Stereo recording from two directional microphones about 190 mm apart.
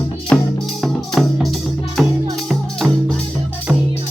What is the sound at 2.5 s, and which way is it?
Music, centre (ahead or behind).